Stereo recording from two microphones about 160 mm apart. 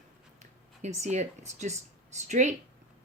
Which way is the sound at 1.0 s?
45° right (ahead or behind).